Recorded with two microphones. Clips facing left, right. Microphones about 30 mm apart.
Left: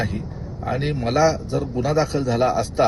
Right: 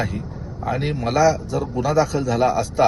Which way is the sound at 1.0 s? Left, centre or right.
Left.